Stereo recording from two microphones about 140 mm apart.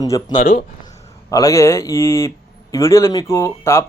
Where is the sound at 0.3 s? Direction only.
80° left.